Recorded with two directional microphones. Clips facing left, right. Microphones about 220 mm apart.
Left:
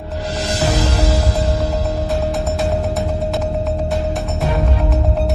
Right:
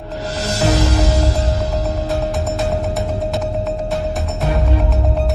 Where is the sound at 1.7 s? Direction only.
Centre (ahead or behind).